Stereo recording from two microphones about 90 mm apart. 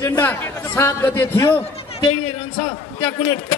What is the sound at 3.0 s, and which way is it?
Speech, 20° left (ahead or behind).